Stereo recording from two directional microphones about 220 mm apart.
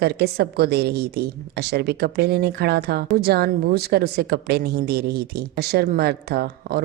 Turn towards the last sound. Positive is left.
turn(degrees=-45)  # may be behind; listen again after turning